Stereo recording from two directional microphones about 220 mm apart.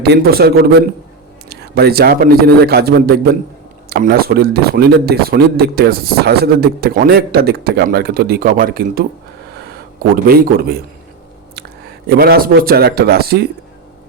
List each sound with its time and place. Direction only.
0.0 s a man's voice: 45° right (ahead or behind)
10.2 s a man's voice: 45° right (ahead or behind)
12.0 s a man's voice: 45° right (ahead or behind)